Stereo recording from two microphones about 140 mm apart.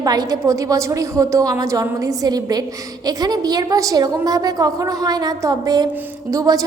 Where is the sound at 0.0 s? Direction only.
25° right (ahead or behind).